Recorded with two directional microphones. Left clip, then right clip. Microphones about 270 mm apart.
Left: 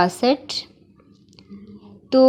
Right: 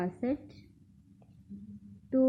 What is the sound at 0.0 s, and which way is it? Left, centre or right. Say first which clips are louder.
Speech: left 16 dB; centre.